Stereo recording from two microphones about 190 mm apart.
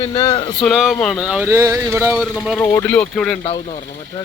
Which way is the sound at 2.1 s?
Centre (ahead or behind).